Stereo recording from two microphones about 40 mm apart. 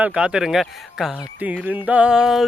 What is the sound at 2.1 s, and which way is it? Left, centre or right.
Speech, centre.